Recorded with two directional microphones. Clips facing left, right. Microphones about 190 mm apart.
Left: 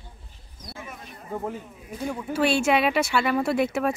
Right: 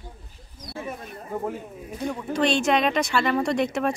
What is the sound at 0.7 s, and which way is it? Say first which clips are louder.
Speech: right 7 dB; 35° right (ahead or behind).